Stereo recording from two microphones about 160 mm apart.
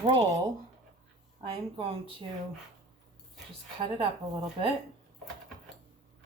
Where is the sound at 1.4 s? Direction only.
30° right (ahead or behind).